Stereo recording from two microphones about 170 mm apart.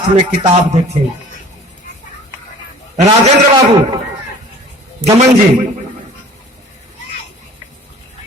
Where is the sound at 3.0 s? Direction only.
40° right (ahead or behind).